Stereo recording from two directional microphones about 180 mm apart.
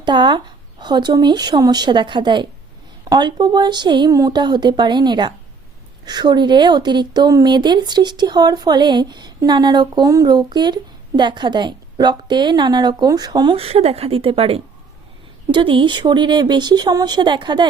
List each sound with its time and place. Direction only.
0.0 s speech: 25° right (ahead or behind)